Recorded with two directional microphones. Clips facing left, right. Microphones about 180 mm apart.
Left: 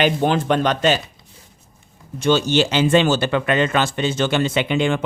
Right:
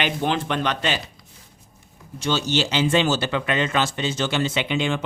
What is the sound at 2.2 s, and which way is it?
Speech, 55° left (ahead or behind).